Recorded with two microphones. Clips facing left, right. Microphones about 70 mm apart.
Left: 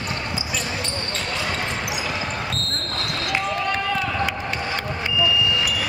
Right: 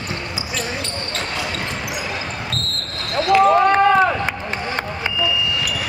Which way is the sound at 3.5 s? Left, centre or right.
Right.